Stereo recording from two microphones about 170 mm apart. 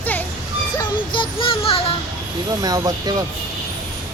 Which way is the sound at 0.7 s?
30° left (ahead or behind).